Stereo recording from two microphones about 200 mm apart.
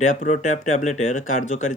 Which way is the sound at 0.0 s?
40° left (ahead or behind).